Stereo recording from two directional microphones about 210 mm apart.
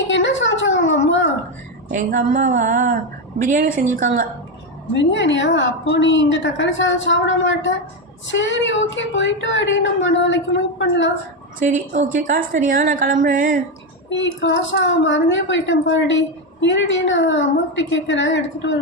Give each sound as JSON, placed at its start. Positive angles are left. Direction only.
{"t": 0.1, "sound": "a sound", "side_deg": 65}
{"t": 1.9, "sound": "a woman's voice", "side_deg": -40}
{"t": 4.9, "sound": "a woman's voice", "side_deg": 60}
{"t": 11.6, "sound": "a woman's voice", "side_deg": -35}
{"t": 14.1, "sound": "a woman's voice", "side_deg": 60}